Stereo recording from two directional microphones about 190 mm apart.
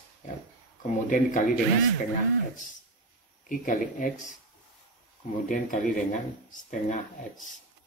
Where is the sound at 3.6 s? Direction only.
45° left (ahead or behind).